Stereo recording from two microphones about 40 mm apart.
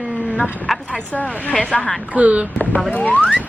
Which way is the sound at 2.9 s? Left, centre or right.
Left.